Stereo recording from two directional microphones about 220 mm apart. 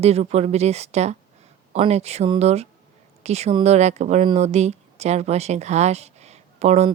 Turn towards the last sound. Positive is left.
turn(degrees=-30)  # may be behind; listen again after turning